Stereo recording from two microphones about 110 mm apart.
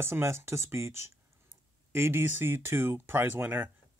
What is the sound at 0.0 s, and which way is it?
Speech, 25° right (ahead or behind).